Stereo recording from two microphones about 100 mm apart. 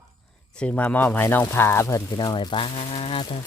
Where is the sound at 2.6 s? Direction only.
80° left.